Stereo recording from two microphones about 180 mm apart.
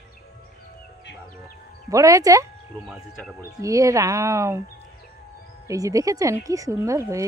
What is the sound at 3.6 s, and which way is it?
Speech, 15° right (ahead or behind).